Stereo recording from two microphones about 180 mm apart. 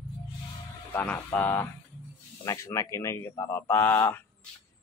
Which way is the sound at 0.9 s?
10° left (ahead or behind).